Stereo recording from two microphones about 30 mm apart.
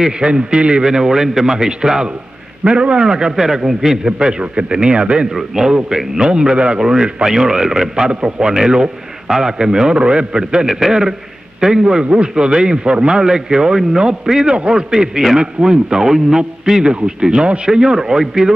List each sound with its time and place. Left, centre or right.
0.2 s a man's voice: right
0.8 s a man's voice: right
2.6 s a man's voice: right
3.0 s a man's voice: right
4.2 s a man's voice: right
5.5 s speech: centre
6.1 s a man's voice: right
6.8 s a man's voice: right
16.8 s a man's voice: right; by 18.5 s centre